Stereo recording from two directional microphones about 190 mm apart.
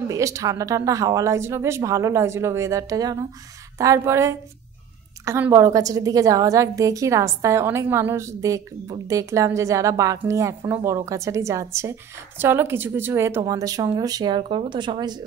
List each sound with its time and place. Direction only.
0.1 s a woman's voice: 15° right (ahead or behind)